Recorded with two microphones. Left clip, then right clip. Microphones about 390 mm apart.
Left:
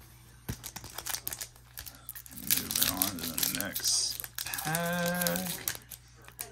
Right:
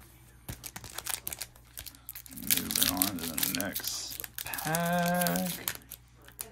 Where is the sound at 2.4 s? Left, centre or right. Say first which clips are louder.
Right 1 dB; centre.